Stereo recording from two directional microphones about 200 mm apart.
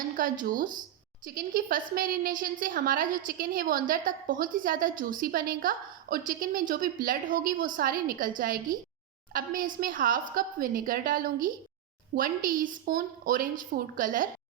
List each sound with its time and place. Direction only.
0.2 s a woman's voice: 45° right (ahead or behind)